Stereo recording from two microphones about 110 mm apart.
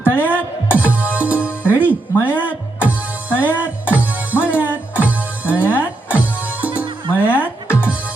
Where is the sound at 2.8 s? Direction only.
15° right (ahead or behind).